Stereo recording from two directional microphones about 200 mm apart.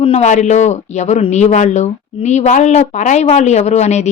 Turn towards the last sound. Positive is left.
turn(degrees=35)  # may be behind; listen again after turning